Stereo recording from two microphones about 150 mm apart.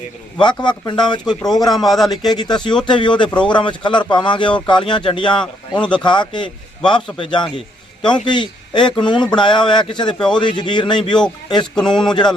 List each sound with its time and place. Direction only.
0.4 s a man's voice: 30° left (ahead or behind)
1.2 s a man's voice: 5° left (ahead or behind)
2.3 s a man's voice: 30° left (ahead or behind)
5.4 s a man's voice: 5° left (ahead or behind)
5.9 s a man's voice: 30° left (ahead or behind)
10.2 s a man's voice: 5° left (ahead or behind)
10.4 s a man's voice: 30° left (ahead or behind)
11.7 s a man's voice: 5° left (ahead or behind)
12.0 s speech: 30° left (ahead or behind)